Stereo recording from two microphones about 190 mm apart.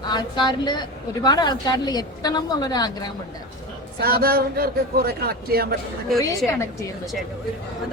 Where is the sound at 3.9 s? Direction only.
55° right (ahead or behind).